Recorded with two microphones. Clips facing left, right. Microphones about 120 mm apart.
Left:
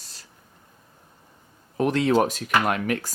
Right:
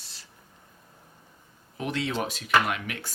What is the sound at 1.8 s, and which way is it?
Speech, 45° left (ahead or behind).